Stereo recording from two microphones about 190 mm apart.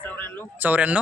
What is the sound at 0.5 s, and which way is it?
Speech, 10° right (ahead or behind).